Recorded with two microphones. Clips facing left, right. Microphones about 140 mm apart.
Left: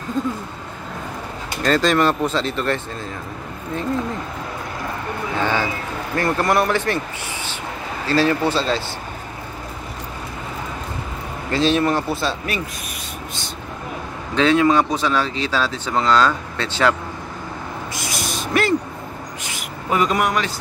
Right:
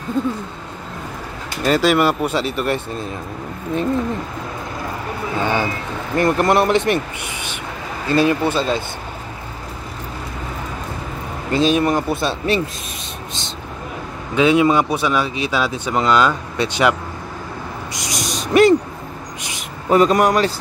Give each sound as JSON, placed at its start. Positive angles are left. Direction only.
{"t": 1.6, "sound": "speech", "side_deg": -10}
{"t": 5.4, "sound": "speech", "side_deg": -15}
{"t": 8.1, "sound": "speech", "side_deg": -15}
{"t": 11.5, "sound": "speech", "side_deg": -15}
{"t": 14.3, "sound": "speech", "side_deg": -15}
{"t": 17.9, "sound": "owl", "side_deg": -20}
{"t": 19.9, "sound": "speech", "side_deg": -35}